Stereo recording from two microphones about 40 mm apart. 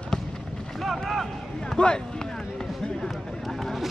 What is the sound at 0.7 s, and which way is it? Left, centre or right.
Boat, centre.